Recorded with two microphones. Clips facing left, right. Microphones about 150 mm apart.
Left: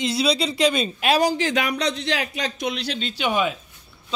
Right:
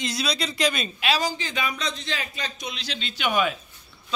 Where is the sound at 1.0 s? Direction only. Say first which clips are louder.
Left 6 dB; 55° left (ahead or behind); by 2.8 s 80° left.